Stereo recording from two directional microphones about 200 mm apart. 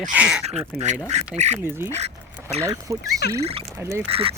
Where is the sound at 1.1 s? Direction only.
35° right (ahead or behind).